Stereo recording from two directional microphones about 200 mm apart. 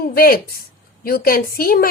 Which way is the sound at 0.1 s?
50° left (ahead or behind).